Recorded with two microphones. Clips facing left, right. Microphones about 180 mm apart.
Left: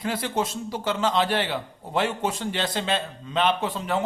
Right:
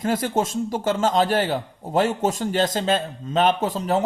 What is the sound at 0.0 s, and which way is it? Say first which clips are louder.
A man's voice: right 4 dB; 45° right (ahead or behind).